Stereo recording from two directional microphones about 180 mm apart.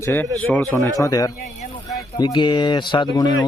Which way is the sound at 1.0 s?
20° left (ahead or behind).